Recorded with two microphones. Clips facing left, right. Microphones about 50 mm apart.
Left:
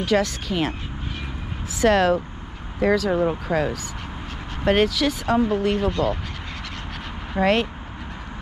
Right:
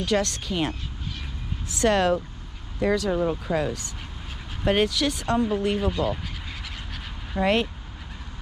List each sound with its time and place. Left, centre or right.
0.0 s speech: centre
3.5 s speech: left
4.6 s speech: centre
7.3 s speech: left